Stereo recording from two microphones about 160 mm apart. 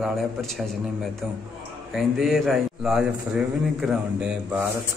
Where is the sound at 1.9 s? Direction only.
Centre (ahead or behind).